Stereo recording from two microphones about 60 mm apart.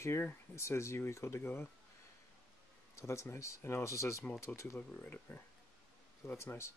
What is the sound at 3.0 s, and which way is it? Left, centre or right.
Speech, left.